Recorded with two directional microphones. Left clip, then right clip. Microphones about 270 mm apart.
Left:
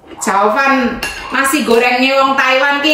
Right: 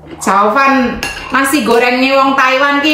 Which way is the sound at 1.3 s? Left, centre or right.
Centre.